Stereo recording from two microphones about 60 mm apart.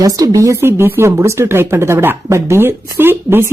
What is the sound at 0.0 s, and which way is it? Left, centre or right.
Speech, right.